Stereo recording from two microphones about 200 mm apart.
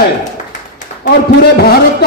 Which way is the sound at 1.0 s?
50° left (ahead or behind).